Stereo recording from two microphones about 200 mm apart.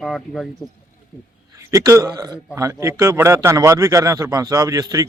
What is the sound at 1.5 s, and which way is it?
Speech, 15° right (ahead or behind).